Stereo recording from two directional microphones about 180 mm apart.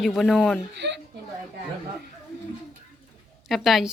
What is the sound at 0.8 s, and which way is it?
Speech, 70° right (ahead or behind).